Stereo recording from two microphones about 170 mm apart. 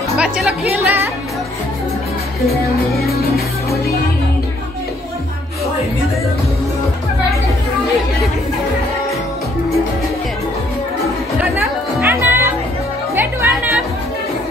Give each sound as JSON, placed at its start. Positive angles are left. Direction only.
{"t": 0.2, "sound": "music", "side_deg": -5}
{"t": 2.4, "sound": "music", "side_deg": 0}
{"t": 3.1, "sound": "music", "side_deg": 65}
{"t": 11.5, "sound": "music", "side_deg": -15}